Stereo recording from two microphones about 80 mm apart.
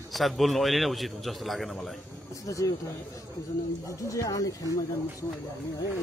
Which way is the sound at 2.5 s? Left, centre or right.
Left.